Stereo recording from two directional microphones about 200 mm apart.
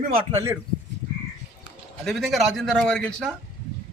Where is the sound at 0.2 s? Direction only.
20° right (ahead or behind).